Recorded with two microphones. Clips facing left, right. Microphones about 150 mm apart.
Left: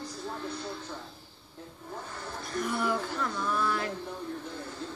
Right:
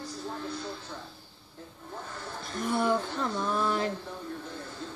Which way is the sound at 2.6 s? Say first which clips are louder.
Right 4 dB; 25° right (ahead or behind).